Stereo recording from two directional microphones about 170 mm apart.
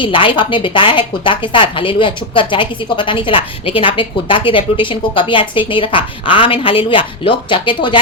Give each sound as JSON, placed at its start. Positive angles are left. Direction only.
{"t": 0.0, "sound": "a woman's voice", "side_deg": 30}